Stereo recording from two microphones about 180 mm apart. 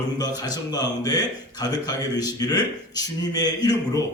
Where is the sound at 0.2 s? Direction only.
20° left (ahead or behind).